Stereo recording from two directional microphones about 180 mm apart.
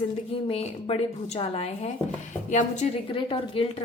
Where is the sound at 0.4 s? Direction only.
35° left (ahead or behind).